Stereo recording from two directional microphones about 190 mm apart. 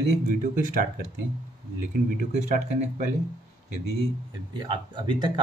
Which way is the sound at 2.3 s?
35° right (ahead or behind).